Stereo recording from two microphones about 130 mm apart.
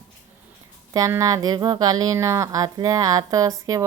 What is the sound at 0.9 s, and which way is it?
A woman's voice, 25° right (ahead or behind).